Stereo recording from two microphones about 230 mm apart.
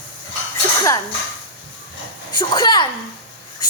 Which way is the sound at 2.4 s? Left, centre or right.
Centre.